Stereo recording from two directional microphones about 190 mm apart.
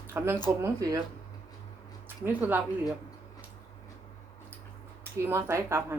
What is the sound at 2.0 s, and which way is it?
Speech, 10° right (ahead or behind).